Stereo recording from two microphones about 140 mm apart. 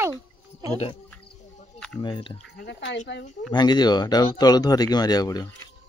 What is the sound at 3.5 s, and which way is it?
Speech, 30° left (ahead or behind).